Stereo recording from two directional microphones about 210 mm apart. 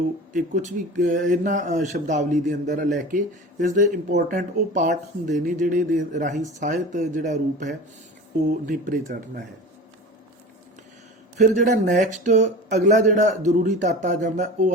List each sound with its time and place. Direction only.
0.3 s a man's voice: 35° right (ahead or behind)
11.3 s a man's voice: 35° right (ahead or behind)